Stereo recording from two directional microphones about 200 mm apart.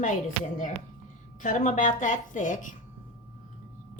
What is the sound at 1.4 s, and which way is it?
A woman's voice, 40° left (ahead or behind).